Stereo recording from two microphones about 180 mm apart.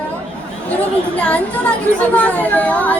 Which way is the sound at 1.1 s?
10° left (ahead or behind).